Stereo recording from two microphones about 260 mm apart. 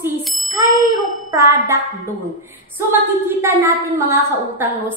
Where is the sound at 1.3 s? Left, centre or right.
Centre.